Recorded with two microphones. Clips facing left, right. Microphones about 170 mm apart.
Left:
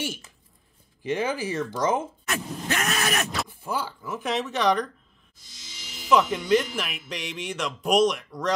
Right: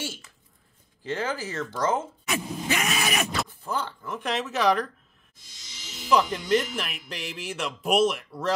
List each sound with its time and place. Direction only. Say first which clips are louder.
1.0 s speech: left 3 dB; 15° left (ahead or behind)
2.2 s groan: right 1 dB; centre (ahead or behind)
3.4 s speech: left 1 dB; 10° left (ahead or behind)
6.0 s speech: left 2 dB; centre (ahead or behind)